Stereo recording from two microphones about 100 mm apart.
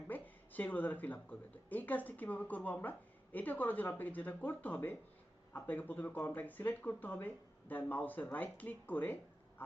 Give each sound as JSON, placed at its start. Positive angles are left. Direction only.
{"t": 0.1, "sound": "speech", "side_deg": 15}